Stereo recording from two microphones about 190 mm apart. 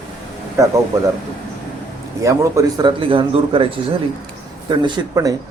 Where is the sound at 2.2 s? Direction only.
15° right (ahead or behind).